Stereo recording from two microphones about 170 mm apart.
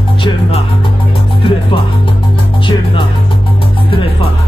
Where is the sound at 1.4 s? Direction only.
30° left (ahead or behind).